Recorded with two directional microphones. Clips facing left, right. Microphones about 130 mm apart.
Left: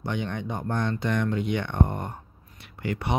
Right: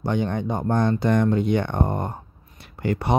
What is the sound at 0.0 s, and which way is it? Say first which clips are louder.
Speech: right 6 dB; 40° right (ahead or behind).